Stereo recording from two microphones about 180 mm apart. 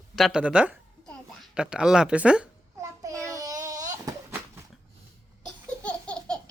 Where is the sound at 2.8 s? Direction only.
15° right (ahead or behind).